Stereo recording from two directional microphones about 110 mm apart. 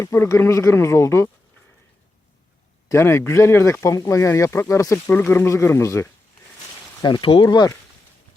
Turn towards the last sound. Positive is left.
turn(degrees=40)  # may be behind; listen again after turning